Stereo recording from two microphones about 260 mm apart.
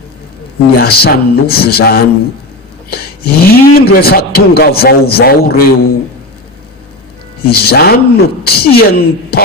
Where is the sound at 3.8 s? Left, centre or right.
Left.